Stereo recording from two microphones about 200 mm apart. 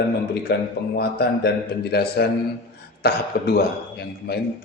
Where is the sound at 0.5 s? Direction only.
50° left (ahead or behind).